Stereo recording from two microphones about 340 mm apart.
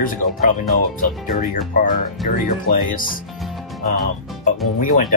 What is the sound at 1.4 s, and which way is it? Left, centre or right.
Speech, left.